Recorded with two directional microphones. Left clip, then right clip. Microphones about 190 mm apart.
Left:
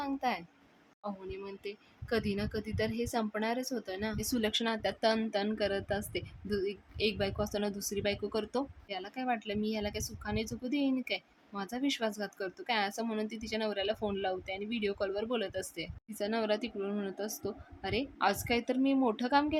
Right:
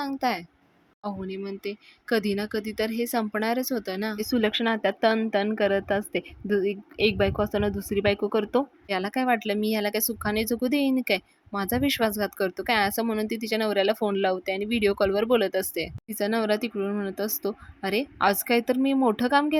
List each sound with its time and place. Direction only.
0.0 s speech: 35° right (ahead or behind)